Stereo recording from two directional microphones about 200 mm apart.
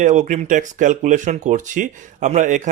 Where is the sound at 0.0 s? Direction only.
35° right (ahead or behind).